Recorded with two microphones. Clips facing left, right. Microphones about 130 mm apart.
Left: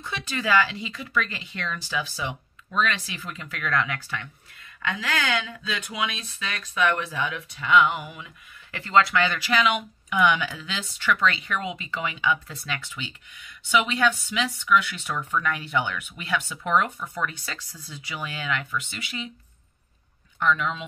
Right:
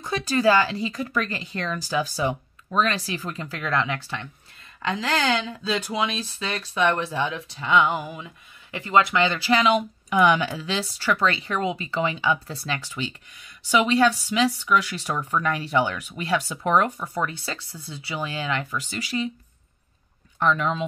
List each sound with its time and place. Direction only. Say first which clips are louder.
0.0 s speech: right 9 dB; 40° right (ahead or behind)
8.7 s speech: right 1 dB; 20° right (ahead or behind); by 19.3 s 35° right (ahead or behind)
20.3 s speech: right 2 dB; 35° right (ahead or behind)